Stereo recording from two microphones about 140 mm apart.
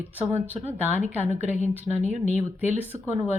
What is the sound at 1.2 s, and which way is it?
Speech, 55° left (ahead or behind).